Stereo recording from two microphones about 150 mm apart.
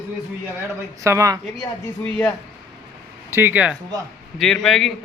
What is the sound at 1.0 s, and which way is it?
Speech, 20° right (ahead or behind).